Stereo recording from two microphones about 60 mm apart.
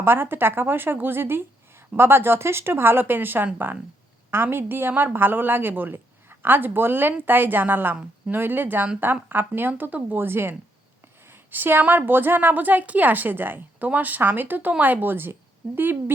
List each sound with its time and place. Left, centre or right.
0.0 s a woman's voice: right